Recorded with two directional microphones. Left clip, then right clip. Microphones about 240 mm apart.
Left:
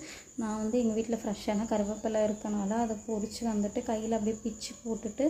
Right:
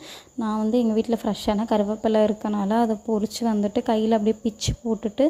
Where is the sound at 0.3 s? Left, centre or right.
Right.